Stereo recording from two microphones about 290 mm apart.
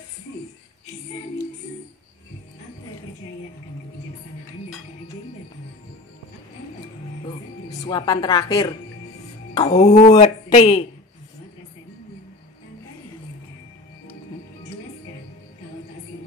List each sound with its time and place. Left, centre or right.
7.8 s a woman's voice: centre